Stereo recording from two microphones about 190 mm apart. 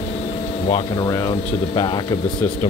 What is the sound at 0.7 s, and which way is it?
Speech, 25° left (ahead or behind).